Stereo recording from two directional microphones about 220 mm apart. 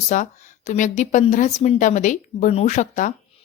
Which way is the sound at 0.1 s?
35° left (ahead or behind).